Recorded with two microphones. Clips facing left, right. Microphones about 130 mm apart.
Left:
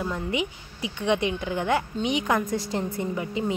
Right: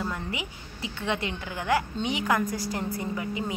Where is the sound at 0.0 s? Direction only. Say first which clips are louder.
Left 5 dB; 20° left (ahead or behind).